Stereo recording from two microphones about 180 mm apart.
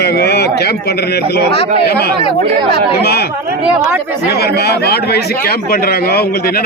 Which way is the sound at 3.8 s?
15° right (ahead or behind).